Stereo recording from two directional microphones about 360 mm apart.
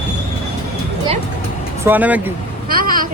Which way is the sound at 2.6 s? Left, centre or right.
Right.